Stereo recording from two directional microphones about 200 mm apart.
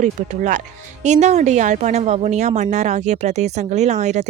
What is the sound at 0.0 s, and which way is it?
A woman's voice, 40° right (ahead or behind).